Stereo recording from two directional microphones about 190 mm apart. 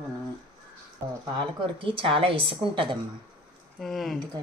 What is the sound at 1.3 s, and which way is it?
Speech, 25° right (ahead or behind).